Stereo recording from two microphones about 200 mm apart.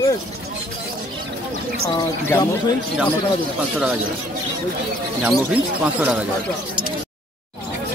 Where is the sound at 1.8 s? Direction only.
20° left (ahead or behind).